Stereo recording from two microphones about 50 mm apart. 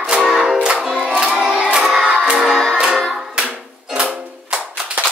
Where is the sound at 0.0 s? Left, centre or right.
Centre.